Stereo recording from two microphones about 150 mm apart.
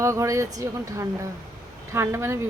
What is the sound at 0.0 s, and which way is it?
Speech, 20° right (ahead or behind).